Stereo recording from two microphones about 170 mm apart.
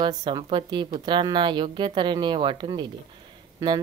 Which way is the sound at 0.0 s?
25° right (ahead or behind).